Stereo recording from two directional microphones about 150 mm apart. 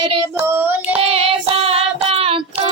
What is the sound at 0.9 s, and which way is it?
Child singing, 40° right (ahead or behind).